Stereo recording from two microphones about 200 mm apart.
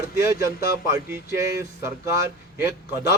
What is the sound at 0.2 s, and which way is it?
A man's voice, 15° right (ahead or behind).